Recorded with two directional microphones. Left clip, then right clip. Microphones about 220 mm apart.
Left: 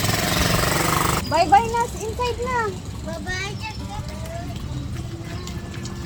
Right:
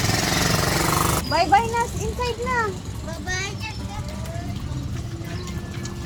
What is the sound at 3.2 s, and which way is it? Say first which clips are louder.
Speech: right 1 dB; 15° left (ahead or behind).